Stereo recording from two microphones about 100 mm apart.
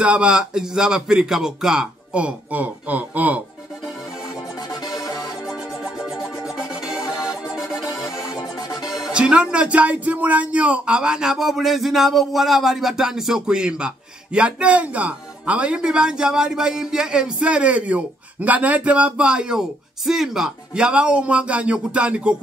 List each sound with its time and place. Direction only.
0.0 s speech: 10° right (ahead or behind)
5.5 s music: 5° right (ahead or behind)
8.8 s speech: 5° right (ahead or behind)